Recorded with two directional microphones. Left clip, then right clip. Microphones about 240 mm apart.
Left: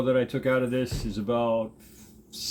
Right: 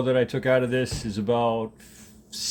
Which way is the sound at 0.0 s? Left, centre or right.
Right.